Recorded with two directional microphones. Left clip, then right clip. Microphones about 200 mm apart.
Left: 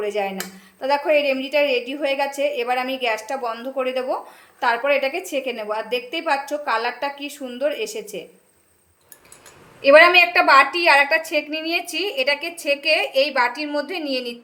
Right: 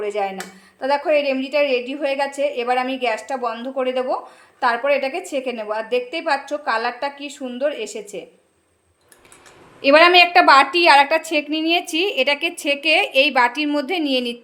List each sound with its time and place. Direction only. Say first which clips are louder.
0.0 s speech: right 1 dB; 5° right (ahead or behind)
9.8 s a woman's voice: even; 30° right (ahead or behind)